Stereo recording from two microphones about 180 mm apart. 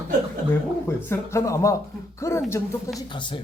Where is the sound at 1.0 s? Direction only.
15° left (ahead or behind).